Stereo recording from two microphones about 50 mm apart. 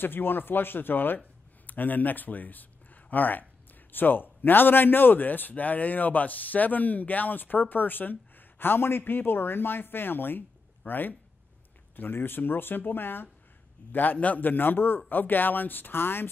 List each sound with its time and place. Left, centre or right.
0.0 s a man's voice: left
14.1 s a man's voice: left